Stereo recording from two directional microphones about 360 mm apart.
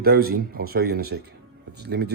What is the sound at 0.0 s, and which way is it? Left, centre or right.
A man's voice, right.